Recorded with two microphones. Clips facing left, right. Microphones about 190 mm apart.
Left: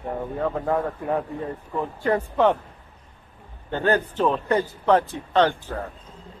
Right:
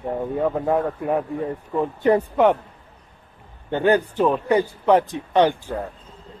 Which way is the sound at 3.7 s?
15° right (ahead or behind).